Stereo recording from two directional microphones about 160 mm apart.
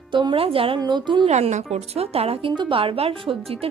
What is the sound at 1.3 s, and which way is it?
A woman's voice, 45° right (ahead or behind).